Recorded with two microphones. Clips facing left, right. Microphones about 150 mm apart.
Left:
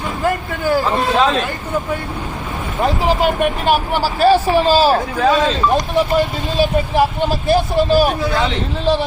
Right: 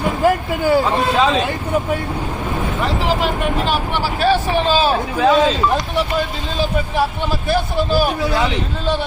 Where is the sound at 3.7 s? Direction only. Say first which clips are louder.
Left 4 dB; 40° left (ahead or behind).